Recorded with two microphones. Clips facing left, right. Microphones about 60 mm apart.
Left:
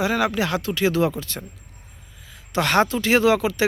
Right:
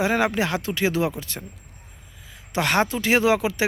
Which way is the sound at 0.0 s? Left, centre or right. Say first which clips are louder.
Even; right.